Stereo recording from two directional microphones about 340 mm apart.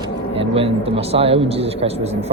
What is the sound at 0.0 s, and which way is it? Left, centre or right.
Speech, centre.